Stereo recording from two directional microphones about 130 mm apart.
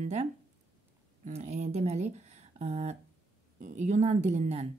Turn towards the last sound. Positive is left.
turn(degrees=-60)  # may be behind; listen again after turning